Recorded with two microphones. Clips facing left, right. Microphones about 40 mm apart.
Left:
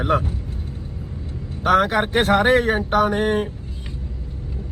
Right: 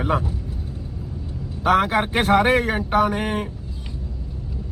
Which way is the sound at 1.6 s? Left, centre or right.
Left.